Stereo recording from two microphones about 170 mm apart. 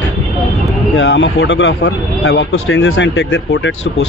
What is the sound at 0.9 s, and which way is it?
Speech, 90° left.